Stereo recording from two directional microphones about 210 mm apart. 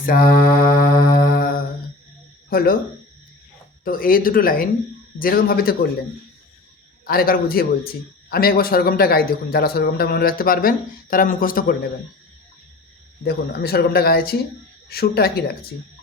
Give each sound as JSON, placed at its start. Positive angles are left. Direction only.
{"t": 0.0, "sound": "mantra", "side_deg": 40}
{"t": 2.5, "sound": "speech", "side_deg": 45}
{"t": 3.8, "sound": "a man's voice", "side_deg": 45}
{"t": 7.0, "sound": "a man's voice", "side_deg": 45}
{"t": 13.2, "sound": "a man's voice", "side_deg": 50}